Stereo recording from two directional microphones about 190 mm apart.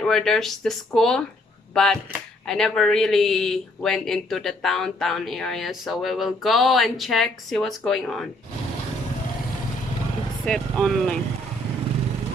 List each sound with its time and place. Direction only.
0.0 s speech: centre (ahead or behind)
10.4 s speech: 5° left (ahead or behind)